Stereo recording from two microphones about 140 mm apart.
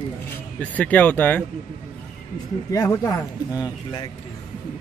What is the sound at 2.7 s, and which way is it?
A man's voice, 20° left (ahead or behind).